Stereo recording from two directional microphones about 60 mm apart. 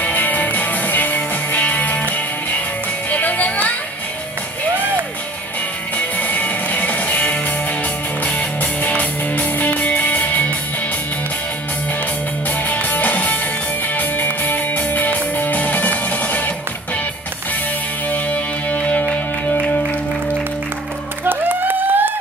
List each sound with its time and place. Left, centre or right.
0.0 s music: left
5.9 s music: left
12.4 s music: left
18.1 s music: left
21.2 s a sound: right